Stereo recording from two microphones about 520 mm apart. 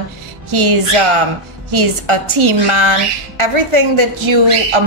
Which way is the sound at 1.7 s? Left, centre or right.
Right.